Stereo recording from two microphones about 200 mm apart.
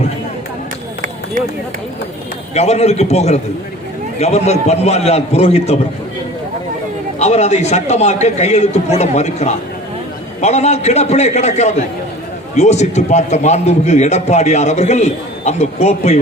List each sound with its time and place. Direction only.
2.6 s a man's voice: 30° left (ahead or behind)
7.2 s a man's voice: 35° left (ahead or behind)